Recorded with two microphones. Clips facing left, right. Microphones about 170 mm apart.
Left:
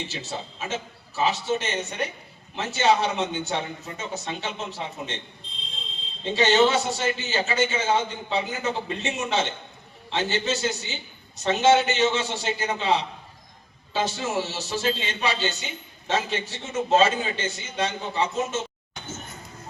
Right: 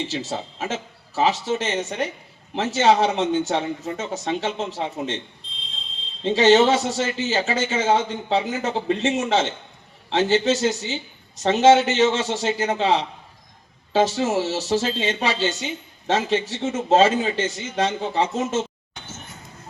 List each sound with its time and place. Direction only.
0.1 s a man's voice: 90° right
6.2 s a man's voice: 90° right